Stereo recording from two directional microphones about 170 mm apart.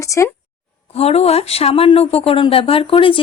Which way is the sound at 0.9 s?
35° left (ahead or behind).